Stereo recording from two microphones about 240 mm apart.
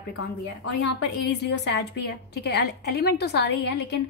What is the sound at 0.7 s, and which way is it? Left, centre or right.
A woman's voice, left.